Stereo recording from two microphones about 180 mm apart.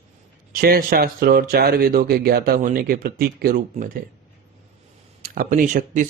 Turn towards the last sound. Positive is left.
turn(degrees=-50)  # may be behind; listen again after turning